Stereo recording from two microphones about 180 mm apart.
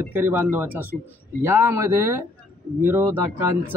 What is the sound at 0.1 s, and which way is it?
Speech, 10° right (ahead or behind).